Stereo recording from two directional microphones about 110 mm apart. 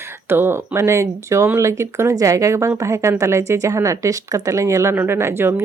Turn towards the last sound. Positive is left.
turn(degrees=-25)  # may be behind; listen again after turning